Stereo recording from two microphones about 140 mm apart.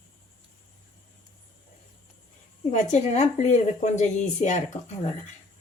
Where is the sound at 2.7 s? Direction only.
60° left (ahead or behind).